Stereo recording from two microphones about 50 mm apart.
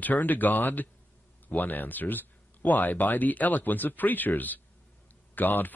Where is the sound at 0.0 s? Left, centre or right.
Left.